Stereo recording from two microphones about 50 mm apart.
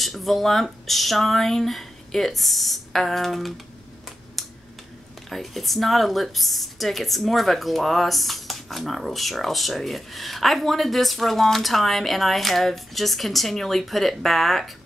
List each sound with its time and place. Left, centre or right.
0.0 s speech: centre
4.4 s a sound: centre
5.3 s speech: centre